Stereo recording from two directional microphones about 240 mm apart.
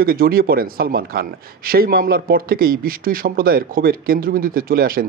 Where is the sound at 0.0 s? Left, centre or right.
Right.